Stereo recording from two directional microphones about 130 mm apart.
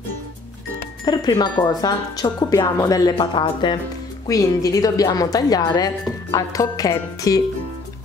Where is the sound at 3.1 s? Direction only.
40° left (ahead or behind).